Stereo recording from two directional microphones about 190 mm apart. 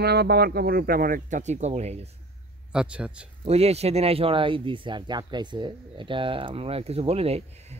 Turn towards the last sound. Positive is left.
turn(degrees=-30)  # may be behind; listen again after turning